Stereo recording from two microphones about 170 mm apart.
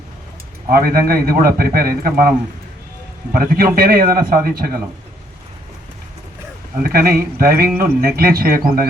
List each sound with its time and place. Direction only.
0.7 s a man's voice: 60° right (ahead or behind)
3.3 s a man's voice: 60° right (ahead or behind)
6.8 s a man's voice: 60° right (ahead or behind)